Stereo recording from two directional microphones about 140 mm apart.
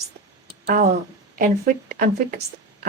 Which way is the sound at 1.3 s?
80° right.